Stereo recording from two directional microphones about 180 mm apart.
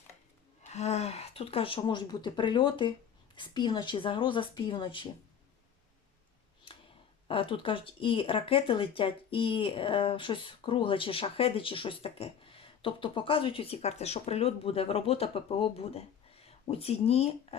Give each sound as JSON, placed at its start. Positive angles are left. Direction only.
{"t": 0.7, "sound": "speech", "side_deg": 40}
{"t": 7.3, "sound": "speech", "side_deg": 30}